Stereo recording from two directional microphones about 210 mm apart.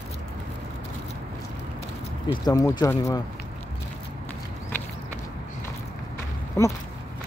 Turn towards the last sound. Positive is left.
turn(degrees=10)  # may be behind; listen again after turning